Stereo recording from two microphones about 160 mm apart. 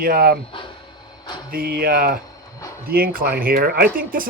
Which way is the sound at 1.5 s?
70° right (ahead or behind).